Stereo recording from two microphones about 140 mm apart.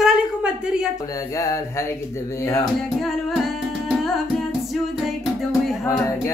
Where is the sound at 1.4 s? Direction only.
25° left (ahead or behind).